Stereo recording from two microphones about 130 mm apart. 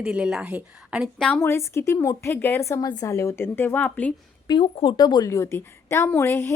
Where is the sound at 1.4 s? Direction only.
20° left (ahead or behind).